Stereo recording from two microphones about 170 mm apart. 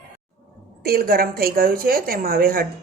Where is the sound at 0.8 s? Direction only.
60° right (ahead or behind).